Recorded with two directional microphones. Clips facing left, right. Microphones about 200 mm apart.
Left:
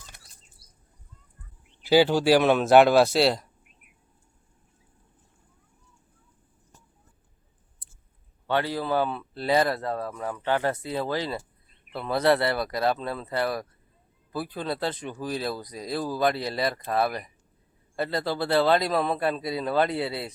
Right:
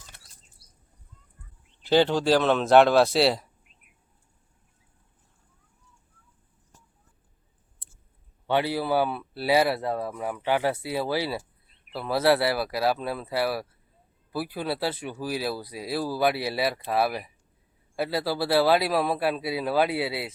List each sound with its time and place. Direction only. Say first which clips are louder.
1.8 s a man's voice: left 2 dB; 5° left (ahead or behind)
7.8 s chewing: right 4 dB; 25° right (ahead or behind)
8.4 s a man's voice: right 1 dB; 15° right (ahead or behind)